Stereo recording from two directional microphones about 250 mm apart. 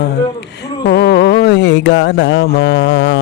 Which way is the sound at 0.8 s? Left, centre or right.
Left.